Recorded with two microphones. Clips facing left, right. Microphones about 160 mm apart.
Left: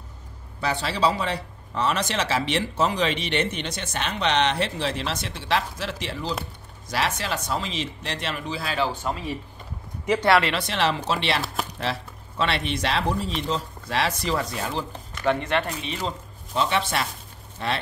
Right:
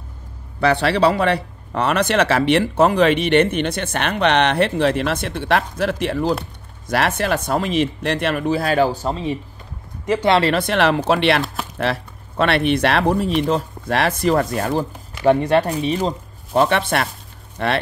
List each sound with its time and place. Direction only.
0.6 s speech: 65° right (ahead or behind); by 9.2 s 35° right (ahead or behind)
10.4 s speech: 50° right (ahead or behind)
15.2 s speech: 35° right (ahead or behind)
16.5 s speech: 55° right (ahead or behind)